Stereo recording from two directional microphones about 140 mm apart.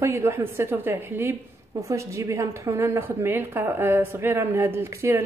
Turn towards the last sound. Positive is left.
turn(degrees=-15)  # may be behind; listen again after turning